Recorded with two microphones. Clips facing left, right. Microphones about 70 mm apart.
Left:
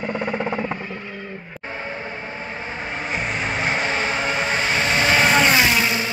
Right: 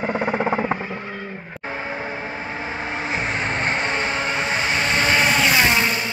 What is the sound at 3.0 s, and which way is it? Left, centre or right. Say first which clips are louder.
Vehicle: even; centre.